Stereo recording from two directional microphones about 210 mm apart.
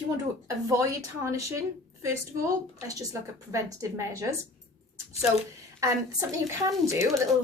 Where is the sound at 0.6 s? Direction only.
15° right (ahead or behind).